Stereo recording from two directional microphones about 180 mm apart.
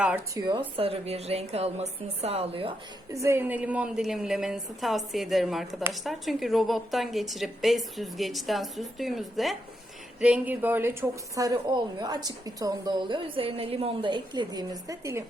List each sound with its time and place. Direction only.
0.3 s a woman's voice: 25° right (ahead or behind)
3.1 s a woman's voice: 15° right (ahead or behind)